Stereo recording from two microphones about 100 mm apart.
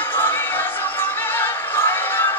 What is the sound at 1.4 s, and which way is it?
Music, 25° left (ahead or behind).